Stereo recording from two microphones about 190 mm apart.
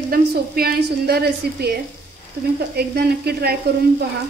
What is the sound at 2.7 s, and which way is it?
Frying, 55° right (ahead or behind).